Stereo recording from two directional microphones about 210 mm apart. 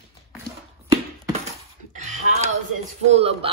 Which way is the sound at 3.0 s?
30° right (ahead or behind).